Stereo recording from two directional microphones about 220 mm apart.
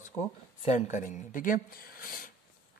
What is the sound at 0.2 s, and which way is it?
Speech, 30° left (ahead or behind).